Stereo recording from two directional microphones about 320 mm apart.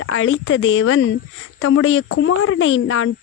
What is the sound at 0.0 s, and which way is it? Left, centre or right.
Speech, left.